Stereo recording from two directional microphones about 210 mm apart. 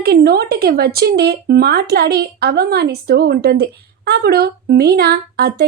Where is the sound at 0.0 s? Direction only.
50° right (ahead or behind).